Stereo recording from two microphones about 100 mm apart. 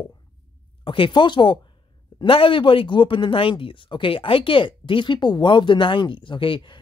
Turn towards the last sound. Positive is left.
turn(degrees=55)  # may be behind; listen again after turning